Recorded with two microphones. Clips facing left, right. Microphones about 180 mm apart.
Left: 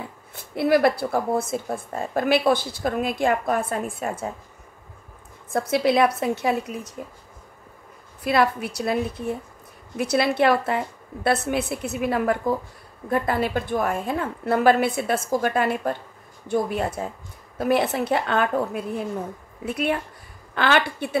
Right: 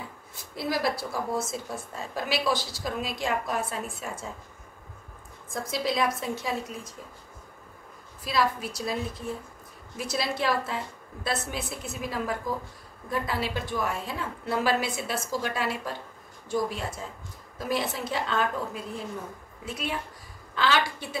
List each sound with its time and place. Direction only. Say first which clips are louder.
0.3 s speech: left 11 dB; 60° left (ahead or behind)
5.5 s speech: left 9 dB; 65° left (ahead or behind)
8.2 s speech: left 6 dB; 60° left (ahead or behind)
13.1 s speech: left 7 dB; 55° left (ahead or behind)